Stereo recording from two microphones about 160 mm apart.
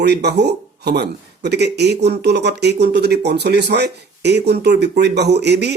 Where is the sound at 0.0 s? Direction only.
90° right.